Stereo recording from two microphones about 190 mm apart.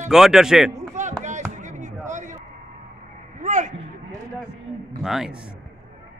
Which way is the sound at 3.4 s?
40° right (ahead or behind).